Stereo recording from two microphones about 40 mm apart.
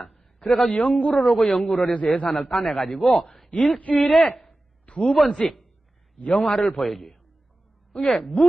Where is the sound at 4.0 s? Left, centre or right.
Centre.